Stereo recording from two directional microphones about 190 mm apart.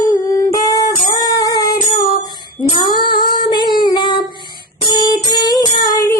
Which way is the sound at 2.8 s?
25° left (ahead or behind).